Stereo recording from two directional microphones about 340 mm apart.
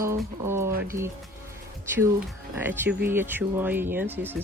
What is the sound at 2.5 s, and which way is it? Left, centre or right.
Speech, centre.